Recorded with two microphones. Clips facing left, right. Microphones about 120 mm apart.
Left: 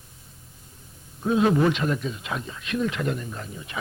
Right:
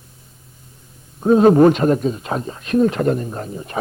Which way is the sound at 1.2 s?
40° right (ahead or behind).